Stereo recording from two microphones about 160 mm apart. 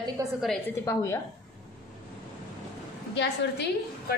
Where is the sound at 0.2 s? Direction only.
20° right (ahead or behind).